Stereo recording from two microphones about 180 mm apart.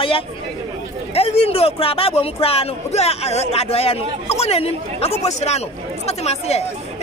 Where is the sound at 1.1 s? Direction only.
35° left (ahead or behind).